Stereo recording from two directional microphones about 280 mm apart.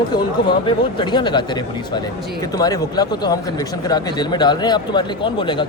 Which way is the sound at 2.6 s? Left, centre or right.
Centre.